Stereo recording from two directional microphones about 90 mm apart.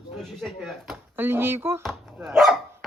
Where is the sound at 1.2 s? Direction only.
25° right (ahead or behind).